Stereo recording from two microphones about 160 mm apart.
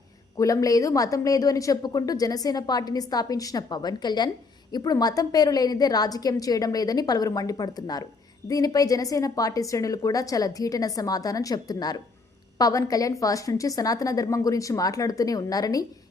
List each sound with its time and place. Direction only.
0.3 s a woman's voice: 20° left (ahead or behind)